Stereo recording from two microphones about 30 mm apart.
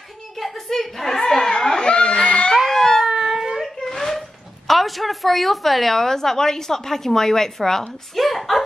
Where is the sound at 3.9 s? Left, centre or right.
Centre.